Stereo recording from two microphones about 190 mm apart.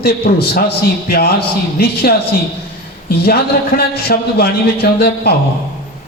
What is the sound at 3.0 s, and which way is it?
A man's voice, 55° left (ahead or behind).